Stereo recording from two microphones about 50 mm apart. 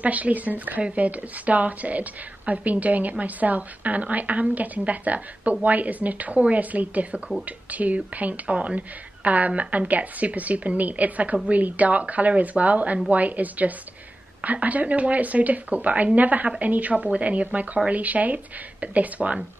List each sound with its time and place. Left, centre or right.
0.0 s a woman's voice: right